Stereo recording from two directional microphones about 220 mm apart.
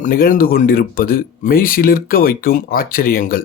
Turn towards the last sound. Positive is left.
turn(degrees=40)  # may be behind; listen again after turning